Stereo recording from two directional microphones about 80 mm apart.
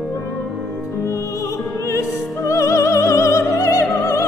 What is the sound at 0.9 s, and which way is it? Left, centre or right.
Music, left.